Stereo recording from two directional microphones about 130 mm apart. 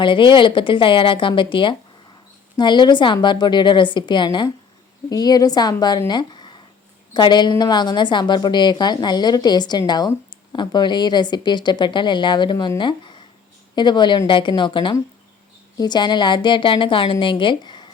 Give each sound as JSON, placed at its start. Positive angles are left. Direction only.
{"t": 0.0, "sound": "a woman's voice", "side_deg": 40}
{"t": 6.1, "sound": "a sound", "side_deg": 35}
{"t": 7.1, "sound": "a woman's voice", "side_deg": 35}